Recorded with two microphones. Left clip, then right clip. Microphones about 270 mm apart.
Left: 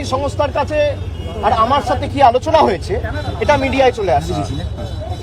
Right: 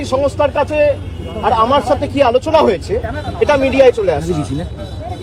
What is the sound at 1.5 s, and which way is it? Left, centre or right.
Speech, centre.